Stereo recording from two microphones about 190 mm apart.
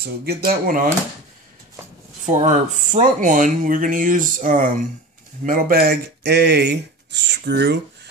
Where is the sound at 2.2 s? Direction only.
40° right (ahead or behind).